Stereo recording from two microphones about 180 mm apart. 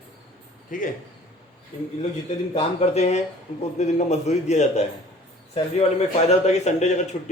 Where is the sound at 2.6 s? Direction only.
35° left (ahead or behind).